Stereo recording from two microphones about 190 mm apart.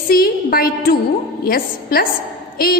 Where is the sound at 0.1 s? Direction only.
50° left (ahead or behind).